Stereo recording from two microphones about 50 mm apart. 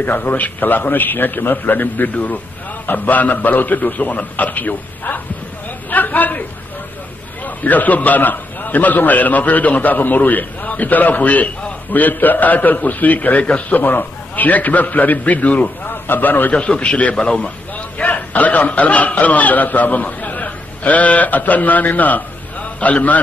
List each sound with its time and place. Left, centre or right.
0.0 s a man's voice: left
5.9 s a sound: left
7.4 s a man's voice: left
16.5 s a man's voice: left